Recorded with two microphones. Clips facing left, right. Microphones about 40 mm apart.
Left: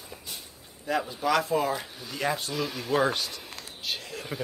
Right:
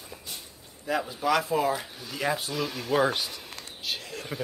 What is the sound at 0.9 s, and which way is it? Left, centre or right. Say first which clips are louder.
Speech: even; centre.